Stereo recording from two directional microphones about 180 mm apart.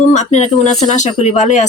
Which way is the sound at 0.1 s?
40° left (ahead or behind).